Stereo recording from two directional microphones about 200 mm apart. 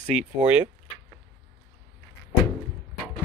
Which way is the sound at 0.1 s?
5° right (ahead or behind).